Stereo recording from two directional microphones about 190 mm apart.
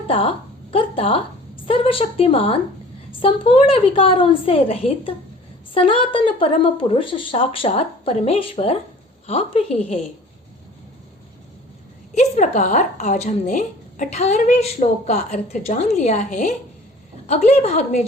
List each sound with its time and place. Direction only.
0.1 s a woman's voice: 30° left (ahead or behind)
12.1 s speech: 40° left (ahead or behind)